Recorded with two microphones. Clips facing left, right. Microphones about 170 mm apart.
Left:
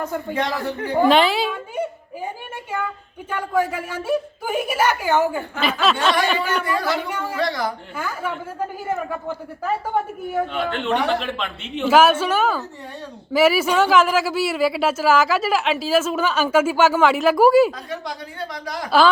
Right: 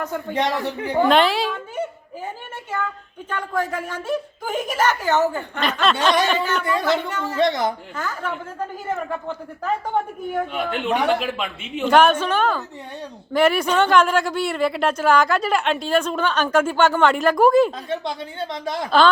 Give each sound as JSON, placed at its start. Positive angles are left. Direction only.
{"t": 1.0, "sound": "speech", "side_deg": 0}
{"t": 2.7, "sound": "speech", "side_deg": 10}
{"t": 6.7, "sound": "speech", "side_deg": -20}
{"t": 7.1, "sound": "speech", "side_deg": 10}
{"t": 7.3, "sound": "speech", "side_deg": -20}
{"t": 7.9, "sound": "speech", "side_deg": 10}
{"t": 10.5, "sound": "speech", "side_deg": -10}
{"t": 17.7, "sound": "speech", "side_deg": -25}
{"t": 18.9, "sound": "speech", "side_deg": 5}